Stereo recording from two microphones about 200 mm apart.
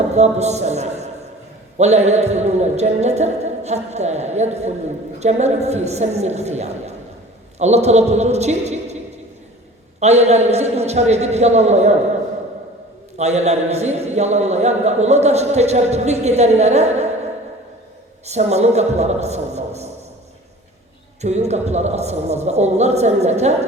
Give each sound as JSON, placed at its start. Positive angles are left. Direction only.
{"t": 0.1, "sound": "a man's voice", "side_deg": -35}
{"t": 10.0, "sound": "a man's voice", "side_deg": -35}
{"t": 13.1, "sound": "a man's voice", "side_deg": -35}
{"t": 18.3, "sound": "a man's voice", "side_deg": -35}
{"t": 21.2, "sound": "a man's voice", "side_deg": -35}